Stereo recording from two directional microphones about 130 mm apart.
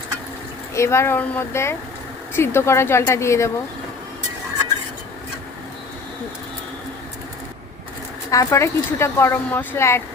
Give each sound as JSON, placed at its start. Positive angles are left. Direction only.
{"t": 0.7, "sound": "speech", "side_deg": 20}
{"t": 8.3, "sound": "speech", "side_deg": 25}